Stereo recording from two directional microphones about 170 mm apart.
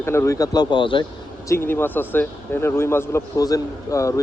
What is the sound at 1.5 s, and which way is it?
A man's voice, 15° left (ahead or behind).